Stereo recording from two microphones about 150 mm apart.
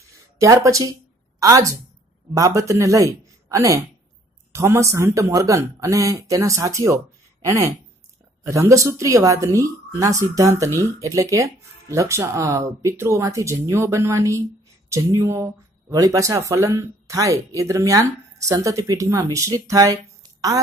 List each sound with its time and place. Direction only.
0.4 s speech: 20° right (ahead or behind)
8.5 s speech: 20° right (ahead or behind)